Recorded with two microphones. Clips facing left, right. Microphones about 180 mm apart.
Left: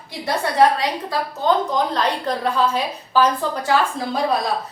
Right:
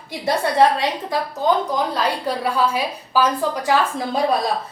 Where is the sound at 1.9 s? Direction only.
10° right (ahead or behind).